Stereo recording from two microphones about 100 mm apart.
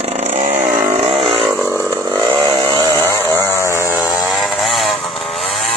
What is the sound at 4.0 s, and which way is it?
Vehicle, centre (ahead or behind).